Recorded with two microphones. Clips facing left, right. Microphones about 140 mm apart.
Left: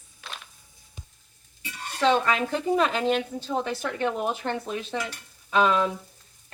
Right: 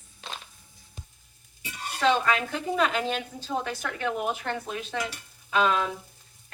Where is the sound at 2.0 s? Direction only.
25° left (ahead or behind).